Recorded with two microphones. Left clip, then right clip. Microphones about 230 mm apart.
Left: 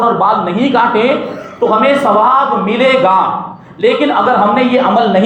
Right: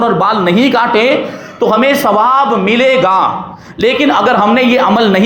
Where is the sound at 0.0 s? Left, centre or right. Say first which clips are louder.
Even; right.